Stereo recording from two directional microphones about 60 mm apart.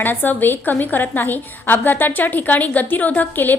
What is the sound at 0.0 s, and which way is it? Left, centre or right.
A woman's voice, left.